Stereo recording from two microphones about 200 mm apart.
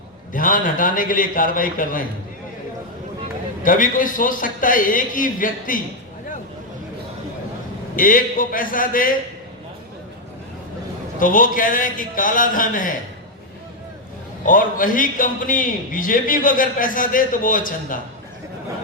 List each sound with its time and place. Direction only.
0.3 s a man's voice: 45° left (ahead or behind)
3.6 s a man's voice: 40° left (ahead or behind)
7.9 s a man's voice: 45° left (ahead or behind)
11.2 s a man's voice: 40° left (ahead or behind)
14.4 s a man's voice: 40° left (ahead or behind)